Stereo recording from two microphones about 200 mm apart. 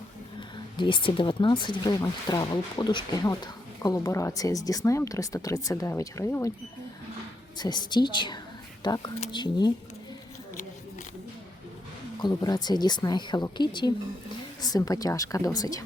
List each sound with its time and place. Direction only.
0.3 s speech: 25° left (ahead or behind)
7.6 s speech: 20° left (ahead or behind)
12.2 s speech: 20° left (ahead or behind)